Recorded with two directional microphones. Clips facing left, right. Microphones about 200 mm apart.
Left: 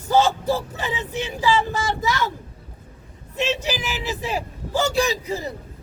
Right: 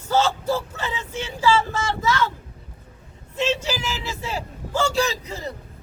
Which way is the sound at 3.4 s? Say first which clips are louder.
Even; 15° left (ahead or behind).